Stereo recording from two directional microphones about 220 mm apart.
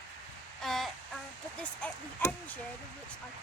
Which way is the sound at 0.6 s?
Centre (ahead or behind).